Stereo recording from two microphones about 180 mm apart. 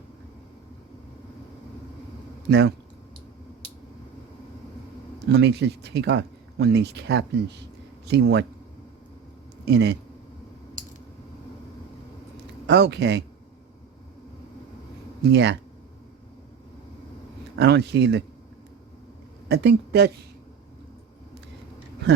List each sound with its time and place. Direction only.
2.5 s speech: 70° right (ahead or behind)
5.3 s speech: 70° right (ahead or behind)
9.6 s speech: 70° right (ahead or behind)
12.6 s speech: 70° right (ahead or behind)
15.2 s speech: 70° right (ahead or behind)
17.6 s speech: 65° right (ahead or behind)
19.5 s speech: 65° right (ahead or behind)